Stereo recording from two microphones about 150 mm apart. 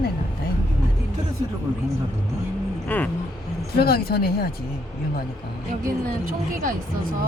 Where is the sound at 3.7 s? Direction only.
90° left.